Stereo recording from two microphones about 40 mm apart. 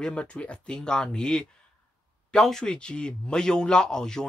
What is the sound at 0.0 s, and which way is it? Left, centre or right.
Speech, left.